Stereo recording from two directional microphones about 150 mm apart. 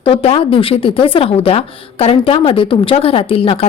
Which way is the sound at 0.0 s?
35° left (ahead or behind).